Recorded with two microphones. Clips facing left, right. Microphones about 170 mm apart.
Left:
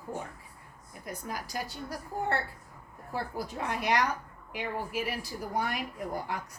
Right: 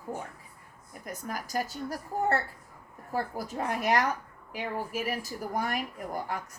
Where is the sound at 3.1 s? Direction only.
45° right (ahead or behind).